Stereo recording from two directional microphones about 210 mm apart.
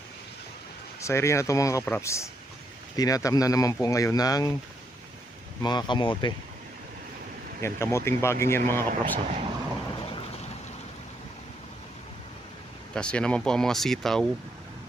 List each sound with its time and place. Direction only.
1.0 s speech: 15° left (ahead or behind)
5.6 s speech: 20° left (ahead or behind)
7.6 s speech: 10° left (ahead or behind)
8.9 s speech: 35° right (ahead or behind)
12.9 s speech: 5° left (ahead or behind)